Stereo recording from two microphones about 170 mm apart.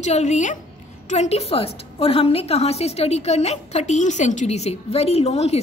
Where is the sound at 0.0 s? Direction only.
40° left (ahead or behind).